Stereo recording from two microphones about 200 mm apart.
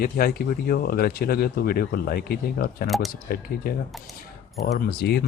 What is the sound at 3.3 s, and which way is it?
Speech, 50° left (ahead or behind).